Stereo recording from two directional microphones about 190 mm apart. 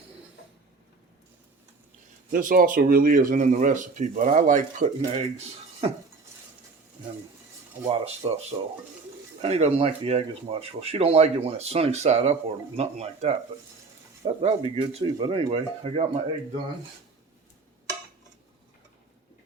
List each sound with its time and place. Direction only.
2.3 s speech: 45° right (ahead or behind)
7.9 s speech: 35° right (ahead or behind)
14.4 s speech: 30° right (ahead or behind)